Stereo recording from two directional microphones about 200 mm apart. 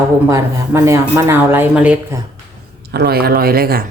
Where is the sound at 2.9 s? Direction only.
50° right (ahead or behind).